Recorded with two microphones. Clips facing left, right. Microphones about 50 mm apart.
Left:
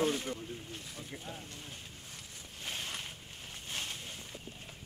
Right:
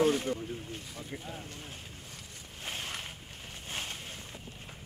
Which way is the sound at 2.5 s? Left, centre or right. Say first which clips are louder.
Right 2 dB; centre.